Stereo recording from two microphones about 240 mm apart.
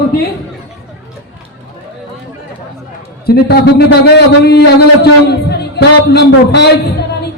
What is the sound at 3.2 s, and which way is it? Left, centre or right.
A man's voice, left.